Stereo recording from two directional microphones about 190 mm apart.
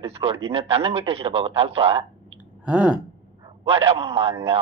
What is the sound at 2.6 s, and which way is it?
Speech, 5° right (ahead or behind).